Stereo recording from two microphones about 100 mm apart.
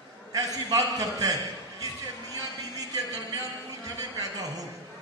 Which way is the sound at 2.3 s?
35° right (ahead or behind).